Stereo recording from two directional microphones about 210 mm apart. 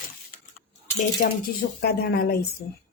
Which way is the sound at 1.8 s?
50° left (ahead or behind).